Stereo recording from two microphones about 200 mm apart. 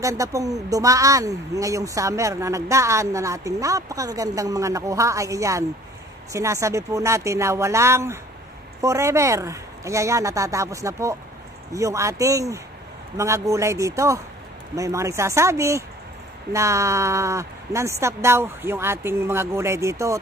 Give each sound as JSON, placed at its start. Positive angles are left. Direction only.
{"t": 0.0, "sound": "speech", "side_deg": -15}